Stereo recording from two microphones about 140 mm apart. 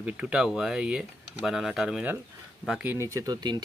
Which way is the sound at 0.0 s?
5° right (ahead or behind).